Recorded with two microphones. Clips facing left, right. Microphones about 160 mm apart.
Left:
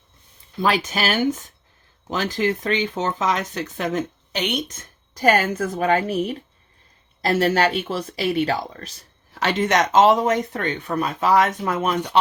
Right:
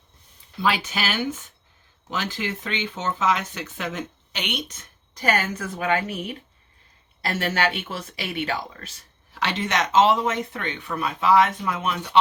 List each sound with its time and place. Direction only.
0.6 s speech: 45° left (ahead or behind)